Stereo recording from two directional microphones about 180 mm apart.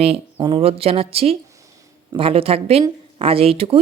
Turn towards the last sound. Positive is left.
turn(degrees=-30)  # may be behind; listen again after turning